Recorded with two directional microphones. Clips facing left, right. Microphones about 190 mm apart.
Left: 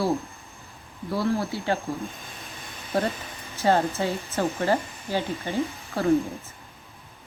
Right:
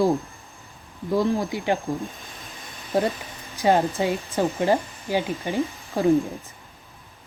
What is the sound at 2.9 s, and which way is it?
Speech, 15° right (ahead or behind).